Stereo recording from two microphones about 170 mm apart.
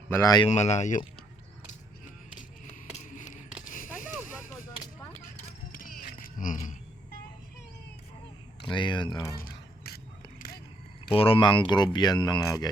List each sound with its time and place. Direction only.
0.1 s speech: 20° left (ahead or behind)
0.4 s speech: 40° left (ahead or behind)
2.9 s a sound: 45° left (ahead or behind)
8.6 s speech: 30° left (ahead or behind)
9.4 s a sound: 60° left (ahead or behind)
11.1 s speech: 35° left (ahead or behind)